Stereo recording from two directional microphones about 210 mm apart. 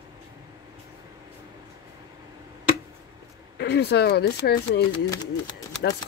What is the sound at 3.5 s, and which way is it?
Speech, 50° left (ahead or behind).